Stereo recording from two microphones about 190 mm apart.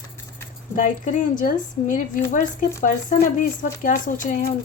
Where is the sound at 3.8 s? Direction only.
45° left (ahead or behind).